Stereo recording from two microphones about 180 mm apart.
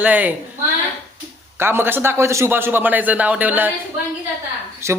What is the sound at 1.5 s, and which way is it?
A man's voice, 15° right (ahead or behind).